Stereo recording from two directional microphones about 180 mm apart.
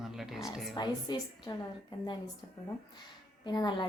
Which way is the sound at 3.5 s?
25° left (ahead or behind).